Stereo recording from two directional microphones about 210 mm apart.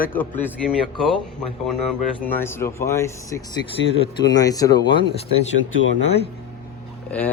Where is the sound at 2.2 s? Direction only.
10° left (ahead or behind); by 5.5 s 25° left (ahead or behind).